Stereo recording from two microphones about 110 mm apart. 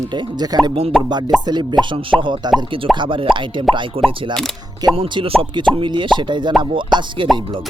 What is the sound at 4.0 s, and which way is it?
Speech, 60° right (ahead or behind).